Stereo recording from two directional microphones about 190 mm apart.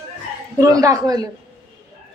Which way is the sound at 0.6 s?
15° right (ahead or behind).